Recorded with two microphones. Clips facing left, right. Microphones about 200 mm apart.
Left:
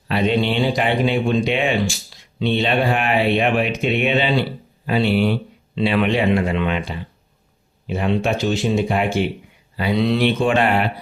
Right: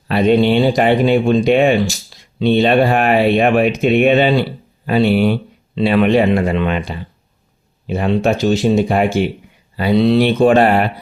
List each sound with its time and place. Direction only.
0.1 s speech: 45° right (ahead or behind)
7.9 s speech: 40° right (ahead or behind)